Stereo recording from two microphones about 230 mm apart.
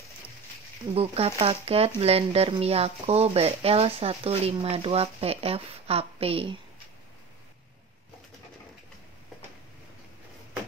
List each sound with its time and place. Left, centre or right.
0.9 s speech: right